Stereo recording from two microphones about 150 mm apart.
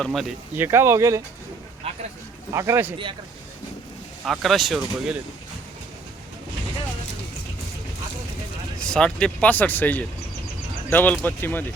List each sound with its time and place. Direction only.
0.0 s speech: centre (ahead or behind)
0.5 s speech: 15° right (ahead or behind)
2.5 s speech: 20° right (ahead or behind)
4.3 s speech: centre (ahead or behind)
8.8 s speech: 5° left (ahead or behind)